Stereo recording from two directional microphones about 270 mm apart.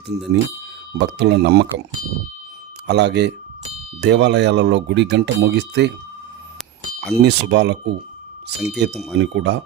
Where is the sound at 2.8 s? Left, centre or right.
Right.